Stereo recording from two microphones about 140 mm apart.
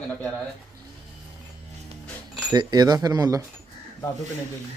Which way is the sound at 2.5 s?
30° right (ahead or behind).